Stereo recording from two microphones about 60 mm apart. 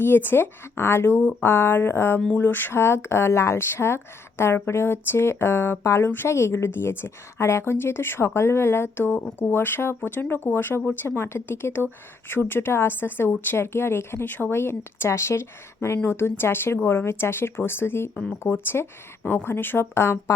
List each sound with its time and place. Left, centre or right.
0.0 s a woman's voice: left
14.3 s a woman's voice: left
14.5 s a woman's voice: left